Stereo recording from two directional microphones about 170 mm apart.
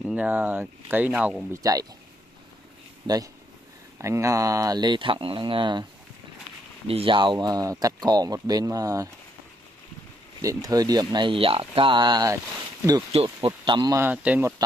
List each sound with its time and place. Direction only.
0.0 s speech: 10° right (ahead or behind)
1.5 s speech: 20° right (ahead or behind)
3.1 s speech: 25° right (ahead or behind)
6.9 s speech: 30° right (ahead or behind)
10.4 s speech: 20° right (ahead or behind)
13.9 s speech: 10° right (ahead or behind)